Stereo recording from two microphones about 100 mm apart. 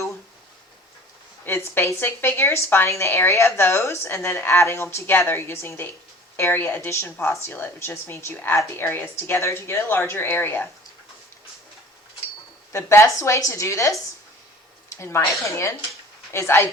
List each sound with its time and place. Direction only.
1.5 s speech: 25° left (ahead or behind)
12.7 s speech: 30° left (ahead or behind)